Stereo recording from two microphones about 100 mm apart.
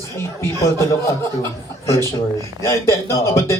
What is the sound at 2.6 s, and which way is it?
Speech, 30° left (ahead or behind).